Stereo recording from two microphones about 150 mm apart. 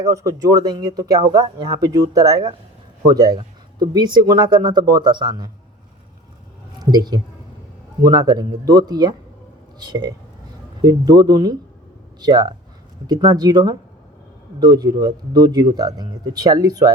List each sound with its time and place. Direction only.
0.0 s speech: 20° right (ahead or behind)
6.7 s speech: 25° right (ahead or behind)